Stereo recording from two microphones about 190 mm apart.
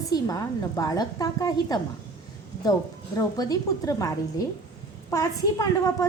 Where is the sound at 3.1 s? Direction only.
20° left (ahead or behind).